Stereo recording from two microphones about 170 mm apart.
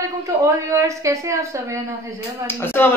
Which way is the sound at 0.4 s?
20° right (ahead or behind).